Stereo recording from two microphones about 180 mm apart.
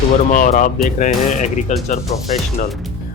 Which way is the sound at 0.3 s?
45° left (ahead or behind).